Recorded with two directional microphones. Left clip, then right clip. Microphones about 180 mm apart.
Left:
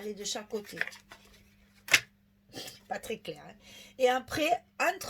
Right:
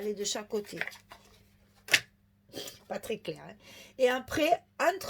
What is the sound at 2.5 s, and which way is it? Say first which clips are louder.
Speech: even; 35° right (ahead or behind).